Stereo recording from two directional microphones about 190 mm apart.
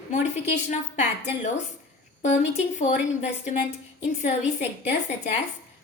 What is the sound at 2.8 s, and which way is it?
A woman's voice, 40° left (ahead or behind).